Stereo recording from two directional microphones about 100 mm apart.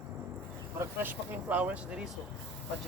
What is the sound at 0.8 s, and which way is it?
Speech, 20° right (ahead or behind).